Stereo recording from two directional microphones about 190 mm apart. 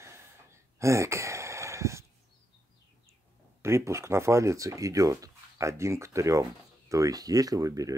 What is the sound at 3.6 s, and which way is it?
Speech, 15° right (ahead or behind).